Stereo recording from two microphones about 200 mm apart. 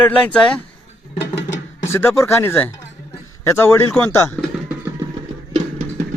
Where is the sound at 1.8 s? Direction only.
10° left (ahead or behind).